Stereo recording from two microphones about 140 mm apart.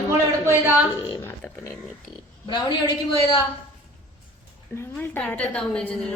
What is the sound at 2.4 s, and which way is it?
Speech, 30° left (ahead or behind).